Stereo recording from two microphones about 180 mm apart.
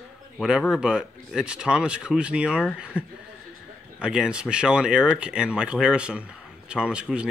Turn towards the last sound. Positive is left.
turn(degrees=-5)  # may be behind; listen again after turning